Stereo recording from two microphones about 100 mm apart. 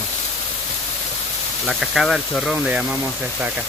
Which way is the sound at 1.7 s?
Centre (ahead or behind).